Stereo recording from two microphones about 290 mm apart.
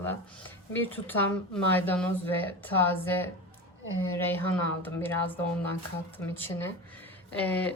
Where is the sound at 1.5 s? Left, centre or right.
Centre.